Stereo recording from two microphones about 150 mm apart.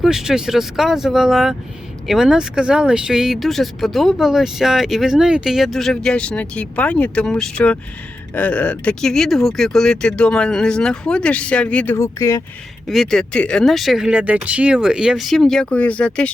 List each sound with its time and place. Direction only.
0.0 s speech: 5° right (ahead or behind)
11.9 s speech: 20° left (ahead or behind)
12.9 s speech: centre (ahead or behind)